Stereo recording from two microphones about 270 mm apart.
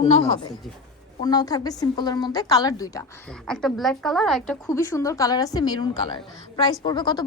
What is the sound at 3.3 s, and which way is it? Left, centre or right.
A woman's voice, centre.